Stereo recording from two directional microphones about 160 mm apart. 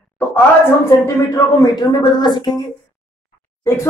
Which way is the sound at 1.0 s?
20° left (ahead or behind).